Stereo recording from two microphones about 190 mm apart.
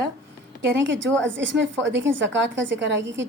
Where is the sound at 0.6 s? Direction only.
70° right (ahead or behind).